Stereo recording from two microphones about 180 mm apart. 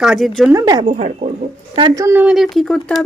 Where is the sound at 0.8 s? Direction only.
40° right (ahead or behind).